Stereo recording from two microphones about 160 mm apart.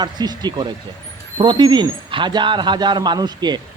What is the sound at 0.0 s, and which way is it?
A man's voice, 25° right (ahead or behind).